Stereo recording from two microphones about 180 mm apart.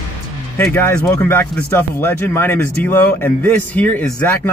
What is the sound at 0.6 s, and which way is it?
Speech, 10° left (ahead or behind).